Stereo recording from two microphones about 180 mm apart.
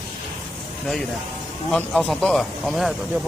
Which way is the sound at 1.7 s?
5° left (ahead or behind).